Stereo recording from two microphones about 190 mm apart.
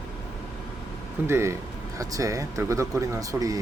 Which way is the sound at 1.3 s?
15° right (ahead or behind).